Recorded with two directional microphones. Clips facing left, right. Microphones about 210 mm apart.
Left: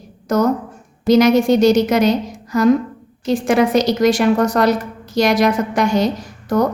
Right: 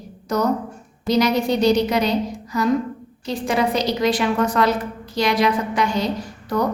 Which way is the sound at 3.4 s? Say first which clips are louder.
Left 5 dB; 45° left (ahead or behind).